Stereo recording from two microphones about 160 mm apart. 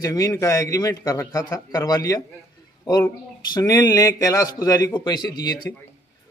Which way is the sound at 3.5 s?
20° left (ahead or behind).